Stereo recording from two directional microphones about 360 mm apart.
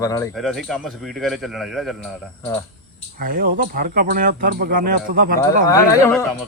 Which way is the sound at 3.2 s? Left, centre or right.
Right.